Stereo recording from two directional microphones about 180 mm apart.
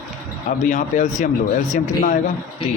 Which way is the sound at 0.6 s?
45° left (ahead or behind).